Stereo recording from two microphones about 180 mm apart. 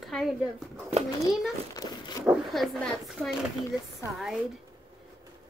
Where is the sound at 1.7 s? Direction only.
20° left (ahead or behind).